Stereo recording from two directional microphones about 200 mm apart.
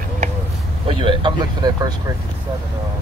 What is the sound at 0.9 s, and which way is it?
Speech, 25° right (ahead or behind).